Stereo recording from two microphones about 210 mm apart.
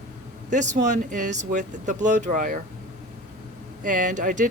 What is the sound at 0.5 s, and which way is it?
Speech, 35° right (ahead or behind).